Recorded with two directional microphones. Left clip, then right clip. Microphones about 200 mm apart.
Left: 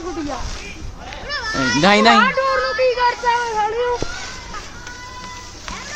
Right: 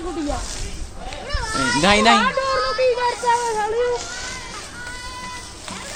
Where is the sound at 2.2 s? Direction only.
50° right (ahead or behind).